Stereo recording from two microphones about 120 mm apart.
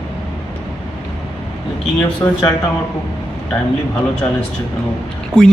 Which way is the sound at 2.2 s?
20° left (ahead or behind).